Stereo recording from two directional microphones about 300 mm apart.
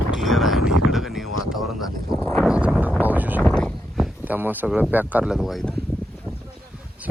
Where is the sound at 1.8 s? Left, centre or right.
Centre.